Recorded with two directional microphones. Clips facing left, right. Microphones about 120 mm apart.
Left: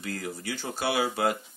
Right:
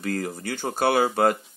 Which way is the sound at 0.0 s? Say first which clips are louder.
Right 6 dB; 50° right (ahead or behind).